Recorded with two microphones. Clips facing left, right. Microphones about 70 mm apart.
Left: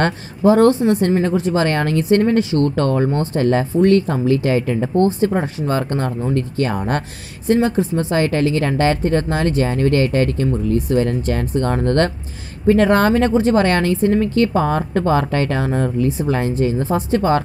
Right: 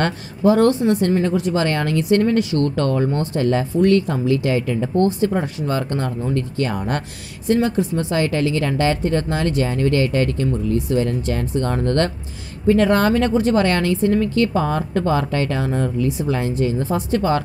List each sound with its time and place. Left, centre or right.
0.0 s speech: left